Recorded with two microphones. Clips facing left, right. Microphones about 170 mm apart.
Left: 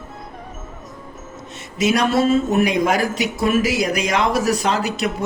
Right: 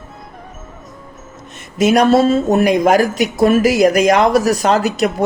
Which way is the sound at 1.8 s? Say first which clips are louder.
Right 6 dB; 45° right (ahead or behind).